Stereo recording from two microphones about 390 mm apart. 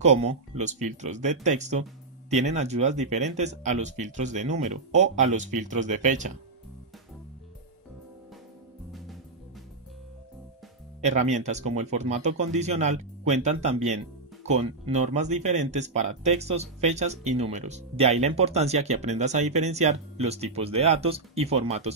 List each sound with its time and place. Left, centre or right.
0.0 s speech: centre
11.0 s speech: centre